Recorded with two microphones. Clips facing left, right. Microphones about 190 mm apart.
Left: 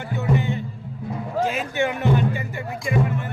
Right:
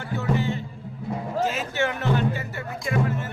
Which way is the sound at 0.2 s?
15° left (ahead or behind).